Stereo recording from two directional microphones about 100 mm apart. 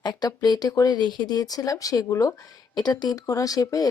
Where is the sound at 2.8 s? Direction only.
45° left (ahead or behind).